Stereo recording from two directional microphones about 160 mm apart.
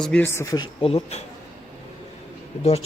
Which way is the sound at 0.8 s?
40° left (ahead or behind).